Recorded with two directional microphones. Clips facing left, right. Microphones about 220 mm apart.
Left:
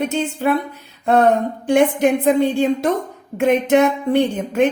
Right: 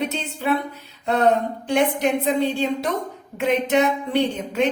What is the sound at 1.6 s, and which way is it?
A woman's voice, 50° left (ahead or behind).